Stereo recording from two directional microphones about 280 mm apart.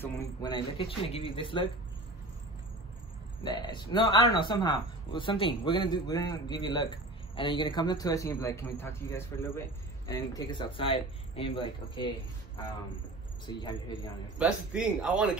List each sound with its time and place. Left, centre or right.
0.0 s speech: centre
3.4 s speech: centre
13.5 s speech: centre
14.4 s speech: centre